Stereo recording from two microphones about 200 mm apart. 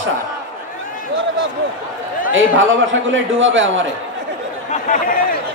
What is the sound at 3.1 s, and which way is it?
Speech, 70° right (ahead or behind).